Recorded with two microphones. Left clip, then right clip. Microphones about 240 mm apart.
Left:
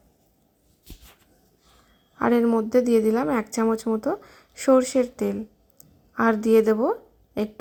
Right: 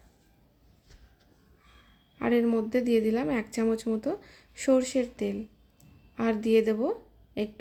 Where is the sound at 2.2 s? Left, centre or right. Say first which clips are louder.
Left 5 dB; centre.